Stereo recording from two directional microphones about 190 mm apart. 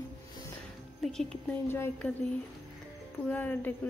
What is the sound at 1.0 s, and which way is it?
Speech, centre (ahead or behind).